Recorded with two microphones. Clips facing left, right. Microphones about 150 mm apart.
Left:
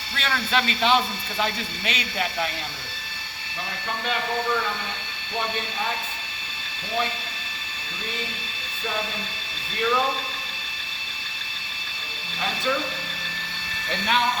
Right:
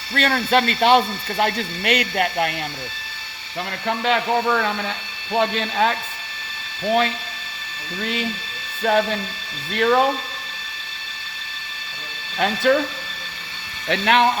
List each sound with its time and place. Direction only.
0.1 s speech: 50° right (ahead or behind)
3.8 s speech: 85° right
5.4 s speech: 85° right
8.8 s speech: 70° right (ahead or behind)
12.4 s speech: 65° right (ahead or behind)
13.9 s speech: 70° right (ahead or behind)